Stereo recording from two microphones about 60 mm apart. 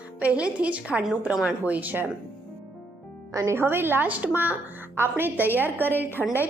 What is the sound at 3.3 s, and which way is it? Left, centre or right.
Speech, right.